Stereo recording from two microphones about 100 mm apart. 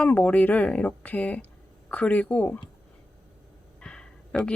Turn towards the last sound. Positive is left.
turn(degrees=10)  # may be behind; listen again after turning